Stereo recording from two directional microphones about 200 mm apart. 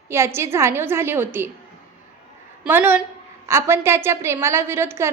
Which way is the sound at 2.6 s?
10° right (ahead or behind).